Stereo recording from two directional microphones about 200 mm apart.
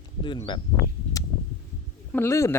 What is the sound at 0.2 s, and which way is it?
Speech, 25° left (ahead or behind).